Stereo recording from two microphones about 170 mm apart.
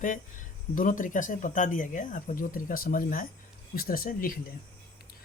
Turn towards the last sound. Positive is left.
turn(degrees=55)  # may be behind; listen again after turning